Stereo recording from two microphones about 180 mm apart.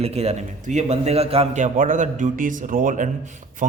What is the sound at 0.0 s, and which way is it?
A man's voice, 35° right (ahead or behind).